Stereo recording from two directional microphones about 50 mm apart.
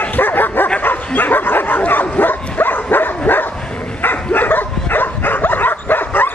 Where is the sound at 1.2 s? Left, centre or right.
Left.